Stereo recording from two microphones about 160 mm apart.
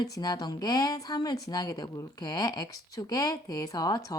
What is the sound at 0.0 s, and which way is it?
A woman's voice, 25° left (ahead or behind).